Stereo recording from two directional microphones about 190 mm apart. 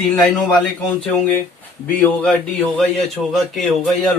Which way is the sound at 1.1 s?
10° left (ahead or behind).